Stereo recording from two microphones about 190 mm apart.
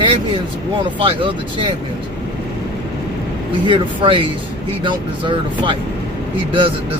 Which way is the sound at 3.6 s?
25° right (ahead or behind).